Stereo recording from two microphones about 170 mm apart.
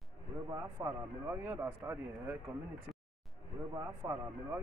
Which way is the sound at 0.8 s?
20° right (ahead or behind).